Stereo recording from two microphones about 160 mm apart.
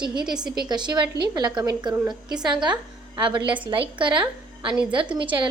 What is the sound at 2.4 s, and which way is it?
A woman's voice, 30° right (ahead or behind).